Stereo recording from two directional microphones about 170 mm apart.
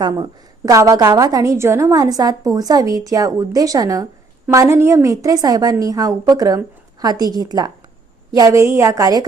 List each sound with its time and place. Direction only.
0.0 s a woman's voice: 20° right (ahead or behind)